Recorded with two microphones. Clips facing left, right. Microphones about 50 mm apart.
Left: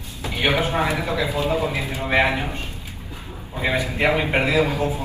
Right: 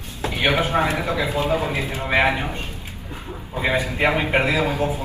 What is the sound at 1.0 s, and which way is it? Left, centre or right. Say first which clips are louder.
Speech: even; right.